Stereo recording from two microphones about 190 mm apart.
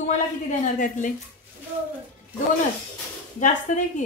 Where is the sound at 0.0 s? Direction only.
40° left (ahead or behind).